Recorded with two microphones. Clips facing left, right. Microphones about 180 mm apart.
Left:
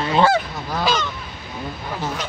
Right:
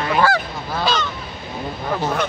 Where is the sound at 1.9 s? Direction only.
60° right (ahead or behind).